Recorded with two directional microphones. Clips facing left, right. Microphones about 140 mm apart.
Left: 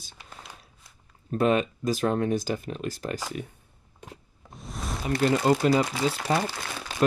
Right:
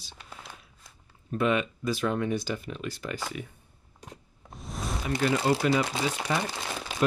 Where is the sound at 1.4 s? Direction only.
40° left (ahead or behind).